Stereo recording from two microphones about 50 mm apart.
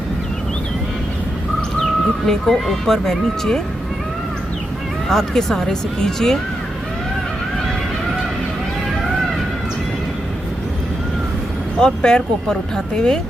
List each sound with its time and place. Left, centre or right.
2.2 s speech: centre
5.0 s speech: centre
11.8 s speech: centre